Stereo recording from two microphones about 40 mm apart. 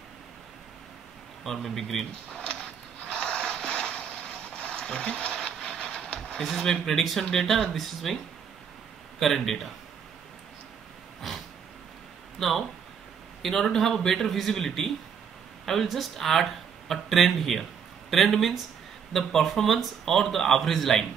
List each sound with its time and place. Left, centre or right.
1.4 s speech: centre
2.3 s a sound: centre
6.6 s speech: centre
9.2 s speech: centre
11.1 s a sound: centre
12.4 s speech: centre